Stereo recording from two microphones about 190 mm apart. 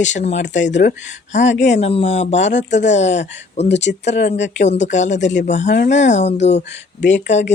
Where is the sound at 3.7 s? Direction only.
65° left (ahead or behind).